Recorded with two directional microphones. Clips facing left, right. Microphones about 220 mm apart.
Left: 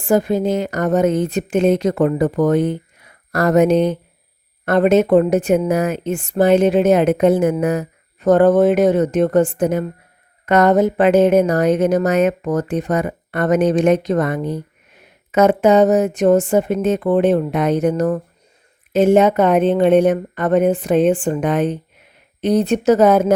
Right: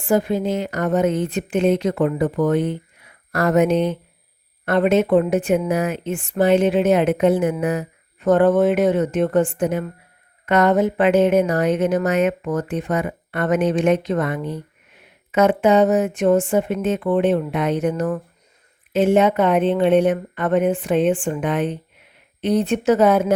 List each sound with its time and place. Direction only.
0.0 s a woman's voice: 40° left (ahead or behind)